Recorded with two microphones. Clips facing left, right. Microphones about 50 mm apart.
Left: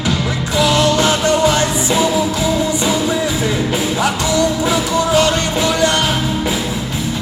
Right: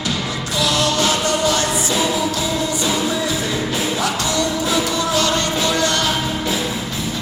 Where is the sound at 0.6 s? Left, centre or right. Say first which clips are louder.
Left 5 dB; left.